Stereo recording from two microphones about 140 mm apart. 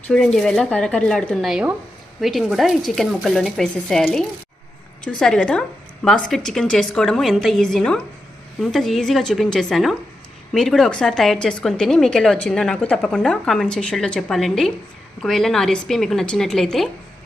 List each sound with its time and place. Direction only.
0.1 s a woman's voice: 5° left (ahead or behind)